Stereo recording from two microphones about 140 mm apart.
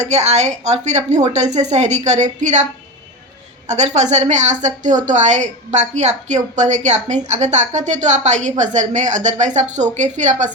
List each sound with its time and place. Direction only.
0.0 s a woman's voice: 55° right (ahead or behind)
3.7 s a woman's voice: 55° right (ahead or behind)